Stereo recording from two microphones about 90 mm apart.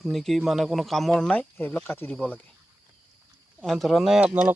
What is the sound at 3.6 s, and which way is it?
Speech, centre (ahead or behind).